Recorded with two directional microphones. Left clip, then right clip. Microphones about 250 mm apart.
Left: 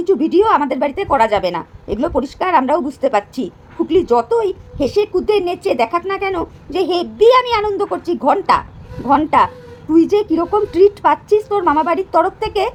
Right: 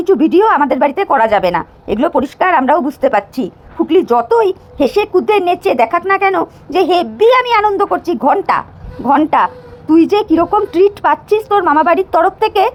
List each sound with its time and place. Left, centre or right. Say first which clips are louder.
0.1 s speech: right 3 dB; centre